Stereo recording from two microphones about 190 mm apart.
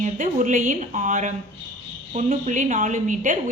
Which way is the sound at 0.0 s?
45° right (ahead or behind).